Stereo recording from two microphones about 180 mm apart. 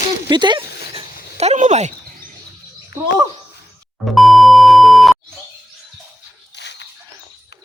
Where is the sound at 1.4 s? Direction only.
40° right (ahead or behind).